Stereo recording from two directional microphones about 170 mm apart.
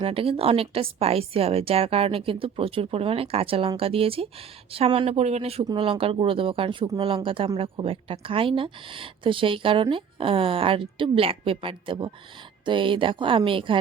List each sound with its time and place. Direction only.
0.0 s speech: 35° right (ahead or behind)